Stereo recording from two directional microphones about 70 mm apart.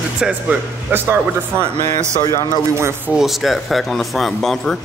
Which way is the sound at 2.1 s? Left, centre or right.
Left.